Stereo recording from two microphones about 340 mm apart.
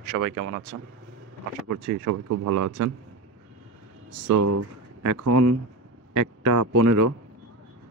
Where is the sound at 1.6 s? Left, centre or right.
Right.